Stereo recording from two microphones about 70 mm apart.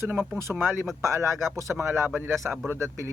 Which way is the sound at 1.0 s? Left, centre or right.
Right.